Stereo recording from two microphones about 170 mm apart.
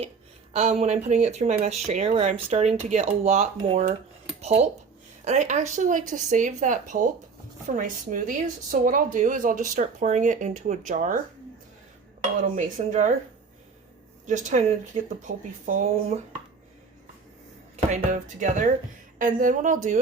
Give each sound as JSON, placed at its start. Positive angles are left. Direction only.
{"t": 0.5, "sound": "speech", "side_deg": -40}
{"t": 2.0, "sound": "speech", "side_deg": -35}
{"t": 4.4, "sound": "a sound", "side_deg": -40}
{"t": 5.2, "sound": "speech", "side_deg": -45}
{"t": 12.4, "sound": "speech", "side_deg": -50}
{"t": 14.3, "sound": "speech", "side_deg": -45}
{"t": 17.9, "sound": "speech", "side_deg": -45}